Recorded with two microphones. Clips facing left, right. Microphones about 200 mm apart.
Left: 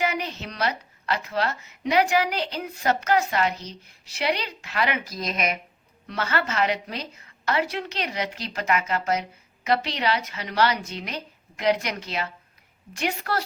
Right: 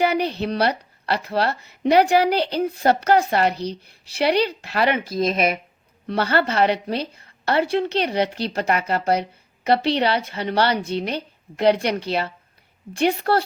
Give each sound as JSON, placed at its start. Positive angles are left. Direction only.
{"t": 0.0, "sound": "a woman's voice", "side_deg": -35}